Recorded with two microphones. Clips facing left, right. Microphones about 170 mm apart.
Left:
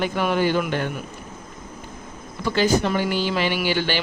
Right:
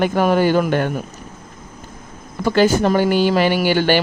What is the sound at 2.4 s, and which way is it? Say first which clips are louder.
Speech: right 5 dB; 50° right (ahead or behind).